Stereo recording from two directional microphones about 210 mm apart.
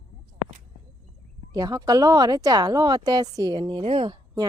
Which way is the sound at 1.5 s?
20° right (ahead or behind).